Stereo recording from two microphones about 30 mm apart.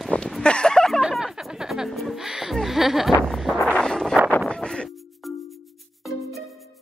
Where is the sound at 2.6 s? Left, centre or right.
Centre.